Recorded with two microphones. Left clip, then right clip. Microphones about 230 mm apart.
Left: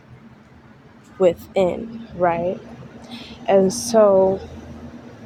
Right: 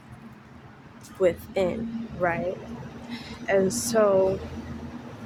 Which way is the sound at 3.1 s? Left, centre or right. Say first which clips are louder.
Left 7 dB; left.